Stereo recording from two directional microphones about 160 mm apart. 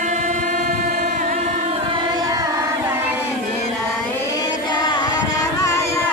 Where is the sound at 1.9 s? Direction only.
25° right (ahead or behind).